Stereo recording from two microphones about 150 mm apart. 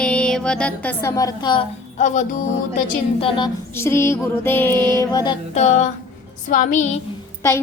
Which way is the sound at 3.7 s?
15° left (ahead or behind).